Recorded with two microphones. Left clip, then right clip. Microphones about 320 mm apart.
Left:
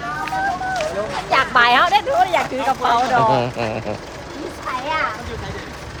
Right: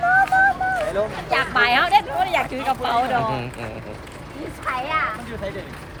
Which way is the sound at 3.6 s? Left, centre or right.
Left.